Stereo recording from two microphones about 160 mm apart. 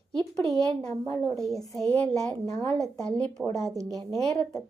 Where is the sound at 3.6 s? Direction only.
20° right (ahead or behind).